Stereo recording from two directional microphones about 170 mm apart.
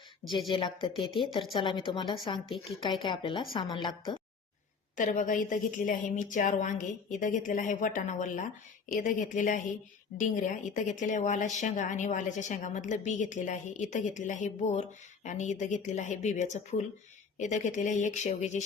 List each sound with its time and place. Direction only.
0.5 s a woman's voice: 30° left (ahead or behind)
4.9 s a woman's voice: 50° left (ahead or behind)